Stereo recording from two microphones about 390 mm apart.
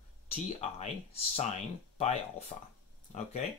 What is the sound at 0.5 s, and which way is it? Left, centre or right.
Speech, centre.